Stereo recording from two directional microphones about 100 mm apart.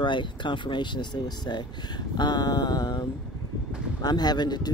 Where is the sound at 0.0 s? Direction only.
55° left (ahead or behind).